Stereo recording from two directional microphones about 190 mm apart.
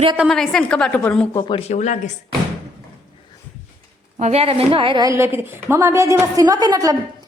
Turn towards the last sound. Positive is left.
turn(degrees=-20)  # may be behind; listen again after turning